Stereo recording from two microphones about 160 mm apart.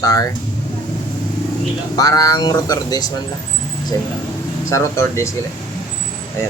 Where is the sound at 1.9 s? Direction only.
20° left (ahead or behind).